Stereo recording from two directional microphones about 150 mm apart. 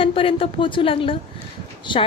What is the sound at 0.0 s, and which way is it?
A woman's voice, 35° left (ahead or behind).